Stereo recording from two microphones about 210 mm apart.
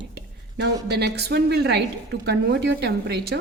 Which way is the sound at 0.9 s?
50° right (ahead or behind).